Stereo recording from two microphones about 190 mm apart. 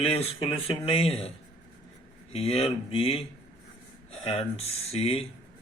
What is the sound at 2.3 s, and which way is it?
Speech, 30° left (ahead or behind).